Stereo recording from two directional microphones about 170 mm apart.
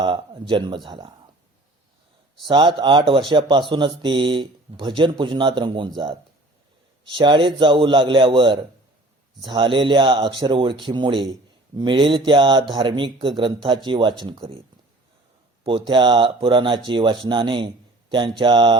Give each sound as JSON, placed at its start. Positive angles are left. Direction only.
{"t": 0.0, "sound": "speech", "side_deg": -30}
{"t": 2.4, "sound": "speech", "side_deg": -30}
{"t": 7.1, "sound": "speech", "side_deg": -30}
{"t": 15.6, "sound": "speech", "side_deg": -30}